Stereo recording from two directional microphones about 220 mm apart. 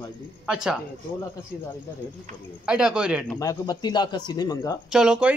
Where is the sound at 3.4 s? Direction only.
15° left (ahead or behind).